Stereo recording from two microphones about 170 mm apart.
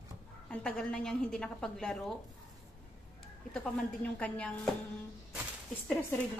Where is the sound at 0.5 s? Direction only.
5° left (ahead or behind).